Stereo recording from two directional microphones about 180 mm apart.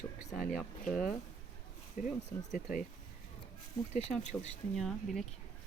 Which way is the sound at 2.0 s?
50° left (ahead or behind).